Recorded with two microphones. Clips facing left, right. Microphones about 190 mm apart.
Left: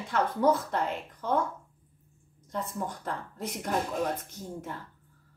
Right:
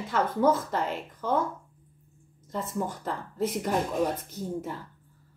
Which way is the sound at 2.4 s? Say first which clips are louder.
Right 3 dB; centre (ahead or behind).